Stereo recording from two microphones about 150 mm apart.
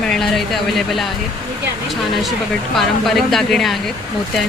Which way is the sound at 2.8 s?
Centre (ahead or behind).